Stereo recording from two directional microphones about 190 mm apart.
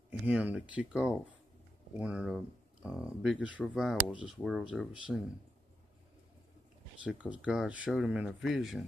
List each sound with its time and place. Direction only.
0.3 s speech: 5° right (ahead or behind)
7.0 s speech: 5° right (ahead or behind)